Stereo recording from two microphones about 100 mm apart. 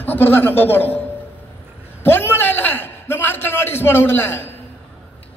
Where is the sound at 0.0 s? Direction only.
20° left (ahead or behind).